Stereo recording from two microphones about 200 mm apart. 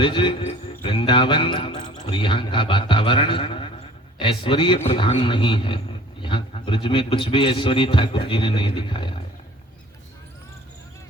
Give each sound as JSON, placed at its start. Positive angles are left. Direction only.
{"t": 0.0, "sound": "a man's voice", "side_deg": 25}